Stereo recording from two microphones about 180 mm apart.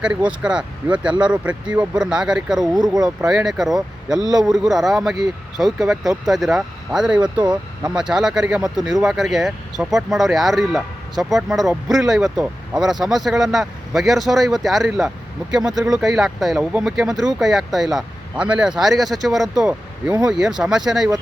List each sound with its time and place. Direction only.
0.0 s speech: 5° right (ahead or behind)
2.7 s speech: 20° right (ahead or behind)
3.2 s speech: centre (ahead or behind)
4.2 s speech: 20° right (ahead or behind)
4.7 s speech: centre (ahead or behind)